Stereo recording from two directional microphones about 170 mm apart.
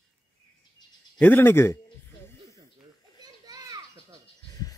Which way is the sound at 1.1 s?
10° left (ahead or behind).